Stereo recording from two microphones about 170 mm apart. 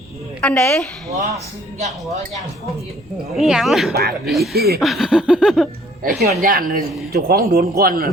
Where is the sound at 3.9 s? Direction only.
65° right (ahead or behind).